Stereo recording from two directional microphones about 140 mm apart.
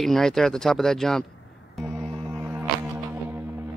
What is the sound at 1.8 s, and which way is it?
Music, centre (ahead or behind).